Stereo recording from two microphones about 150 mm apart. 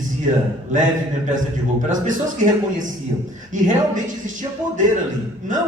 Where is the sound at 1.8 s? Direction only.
55° right (ahead or behind).